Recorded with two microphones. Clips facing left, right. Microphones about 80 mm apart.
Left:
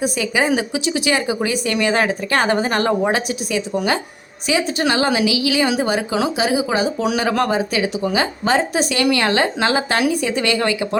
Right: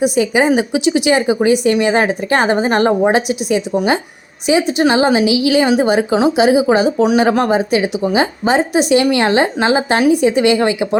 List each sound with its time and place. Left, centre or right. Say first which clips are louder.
0.2 s a woman's voice: right 5 dB; right